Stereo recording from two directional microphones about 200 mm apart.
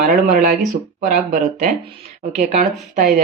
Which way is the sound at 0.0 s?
45° right (ahead or behind).